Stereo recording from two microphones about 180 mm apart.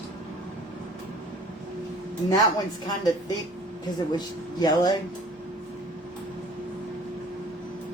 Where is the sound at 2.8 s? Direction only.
20° left (ahead or behind).